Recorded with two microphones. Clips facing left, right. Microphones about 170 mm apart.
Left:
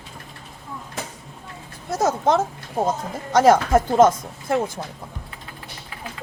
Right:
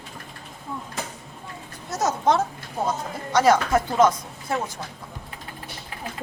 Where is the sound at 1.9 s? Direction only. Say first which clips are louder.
Left 2 dB; 55° left (ahead or behind).